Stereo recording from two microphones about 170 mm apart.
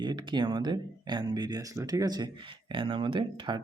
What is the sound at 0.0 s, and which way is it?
Speech, 25° right (ahead or behind).